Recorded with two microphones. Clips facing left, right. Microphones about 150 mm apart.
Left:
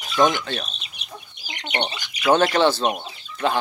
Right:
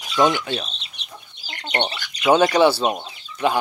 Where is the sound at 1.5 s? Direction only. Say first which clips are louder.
Right 2 dB; 15° left (ahead or behind).